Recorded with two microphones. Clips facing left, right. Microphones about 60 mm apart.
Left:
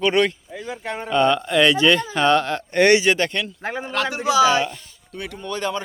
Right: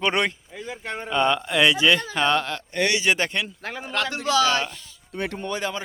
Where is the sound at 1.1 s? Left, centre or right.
Centre.